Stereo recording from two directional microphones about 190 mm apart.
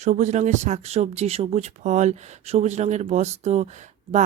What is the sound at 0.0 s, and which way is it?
Speech, 40° right (ahead or behind).